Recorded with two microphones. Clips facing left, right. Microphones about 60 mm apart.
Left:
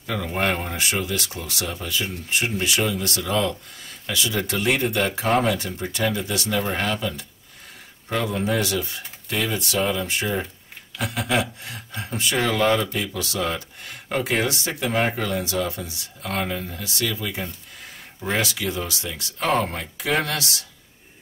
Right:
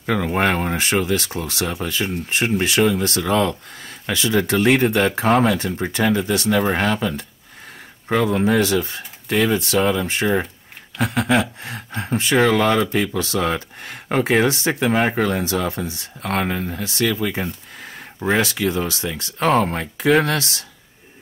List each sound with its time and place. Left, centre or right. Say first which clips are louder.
0.0 s speech: right 5 dB; right
6.5 s speech: right 5 dB; right
8.5 s speech: right 6 dB; right
9.8 s speech: right 4 dB; right
11.0 s speech: right 5 dB; right
12.4 s speech: right 4 dB; right